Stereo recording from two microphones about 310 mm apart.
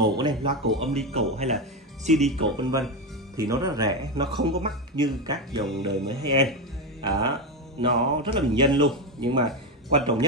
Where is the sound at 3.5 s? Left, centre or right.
Centre.